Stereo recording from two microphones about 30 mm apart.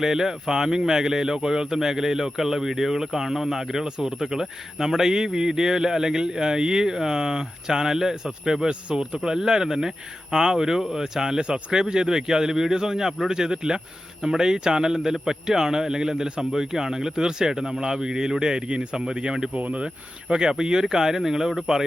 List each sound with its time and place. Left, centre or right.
0.0 s speech: centre
3.8 s a man's voice: right
4.2 s a man's voice: centre
8.6 s a man's voice: right
11.4 s a man's voice: right; by 21.5 s centre